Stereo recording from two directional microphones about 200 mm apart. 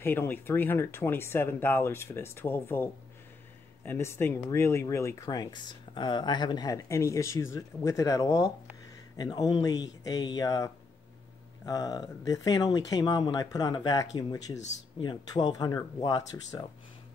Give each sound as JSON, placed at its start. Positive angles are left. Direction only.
{"t": 0.0, "sound": "speech", "side_deg": 10}